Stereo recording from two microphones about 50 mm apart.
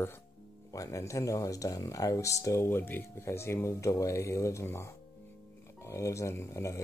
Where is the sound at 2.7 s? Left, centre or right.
Left.